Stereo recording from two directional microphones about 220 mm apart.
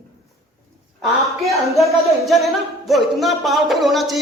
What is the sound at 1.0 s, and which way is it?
Speech, centre (ahead or behind).